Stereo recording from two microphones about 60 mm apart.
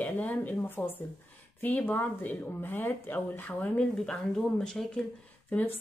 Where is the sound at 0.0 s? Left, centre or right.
Left.